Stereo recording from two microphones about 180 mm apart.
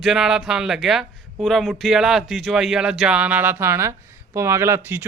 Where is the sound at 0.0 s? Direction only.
Centre (ahead or behind).